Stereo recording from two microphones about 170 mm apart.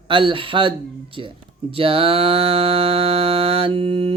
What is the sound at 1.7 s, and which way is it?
Mantra, 35° right (ahead or behind).